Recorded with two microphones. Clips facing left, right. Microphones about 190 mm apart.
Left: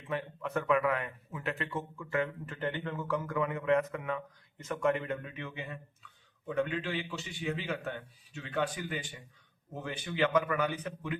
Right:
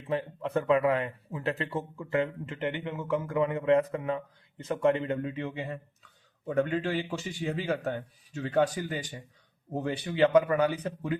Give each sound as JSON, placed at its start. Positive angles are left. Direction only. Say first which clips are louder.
{"t": 0.1, "sound": "speech", "louder": "right 5 dB", "side_deg": -30}